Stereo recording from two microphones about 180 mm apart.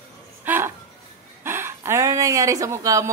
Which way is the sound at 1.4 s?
15° right (ahead or behind).